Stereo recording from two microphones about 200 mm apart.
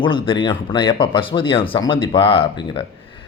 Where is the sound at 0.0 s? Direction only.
25° left (ahead or behind).